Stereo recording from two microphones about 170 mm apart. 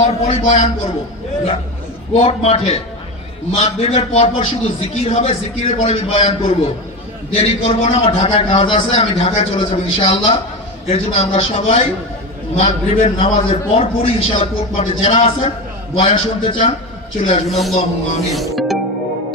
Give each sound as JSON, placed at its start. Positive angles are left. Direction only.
{"t": 0.0, "sound": "a man's voice", "side_deg": 40}
{"t": 2.1, "sound": "a man's voice", "side_deg": 35}
{"t": 17.5, "sound": "a man's voice", "side_deg": 0}